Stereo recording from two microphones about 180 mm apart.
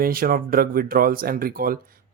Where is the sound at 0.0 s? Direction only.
55° right (ahead or behind).